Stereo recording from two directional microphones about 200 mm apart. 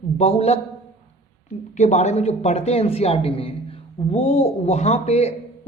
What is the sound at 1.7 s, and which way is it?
A man's voice, 35° left (ahead or behind).